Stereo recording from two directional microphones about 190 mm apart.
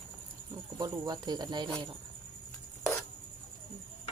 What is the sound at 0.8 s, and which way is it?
Speech, 20° right (ahead or behind).